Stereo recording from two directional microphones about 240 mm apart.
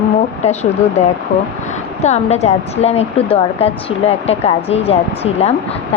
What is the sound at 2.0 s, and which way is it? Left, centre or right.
Speech, left.